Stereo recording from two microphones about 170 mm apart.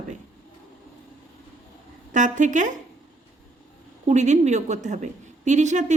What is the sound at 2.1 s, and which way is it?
Speech, 45° right (ahead or behind).